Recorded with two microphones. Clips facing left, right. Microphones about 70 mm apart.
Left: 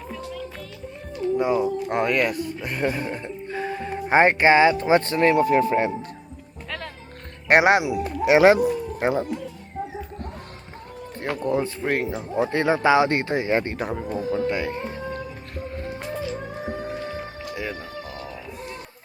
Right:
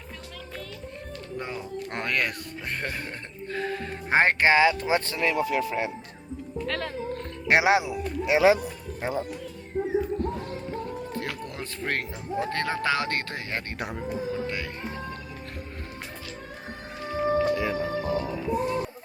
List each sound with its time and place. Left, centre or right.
1.4 s speech: centre
4.1 s speech: centre; by 5.8 s left
7.4 s speech: left
7.9 s speech: left
9.0 s speech: left
11.2 s speech: left
11.6 s speech: centre
13.7 s speech: centre
14.2 s music: left
14.8 s music: centre
17.0 s music: centre
18.1 s music: right